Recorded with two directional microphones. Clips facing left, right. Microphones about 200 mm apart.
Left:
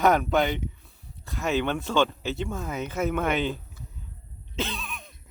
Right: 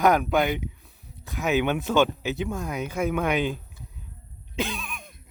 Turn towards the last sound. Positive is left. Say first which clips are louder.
# right 2 dB
turn(degrees=-15)  # may be behind; listen again after turning